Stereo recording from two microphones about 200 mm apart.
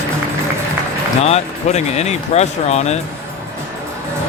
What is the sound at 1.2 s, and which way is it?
Speech, 35° left (ahead or behind).